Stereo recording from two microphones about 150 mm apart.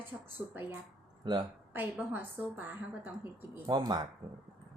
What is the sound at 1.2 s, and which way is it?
Speech, 30° right (ahead or behind).